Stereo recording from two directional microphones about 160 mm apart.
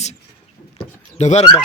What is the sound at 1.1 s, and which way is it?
Speech, 45° left (ahead or behind).